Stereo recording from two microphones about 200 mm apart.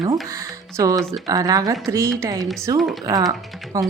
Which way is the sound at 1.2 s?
20° right (ahead or behind).